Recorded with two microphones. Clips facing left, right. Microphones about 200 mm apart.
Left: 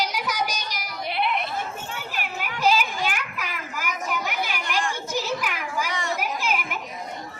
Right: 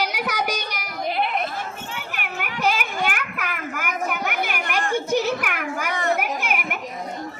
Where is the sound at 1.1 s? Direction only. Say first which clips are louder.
Right 2 dB; 40° right (ahead or behind).